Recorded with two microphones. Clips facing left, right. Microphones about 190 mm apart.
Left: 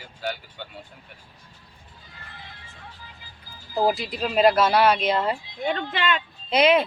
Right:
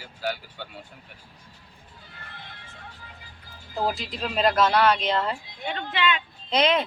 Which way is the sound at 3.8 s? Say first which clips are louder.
Left 4 dB; 10° left (ahead or behind).